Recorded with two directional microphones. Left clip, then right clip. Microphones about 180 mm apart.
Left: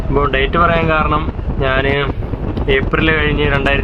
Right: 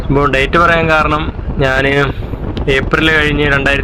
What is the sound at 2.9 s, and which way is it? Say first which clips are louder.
Speech: right 4 dB; 20° right (ahead or behind).